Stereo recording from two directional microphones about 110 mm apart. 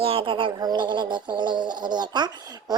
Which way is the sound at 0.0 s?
55° right (ahead or behind).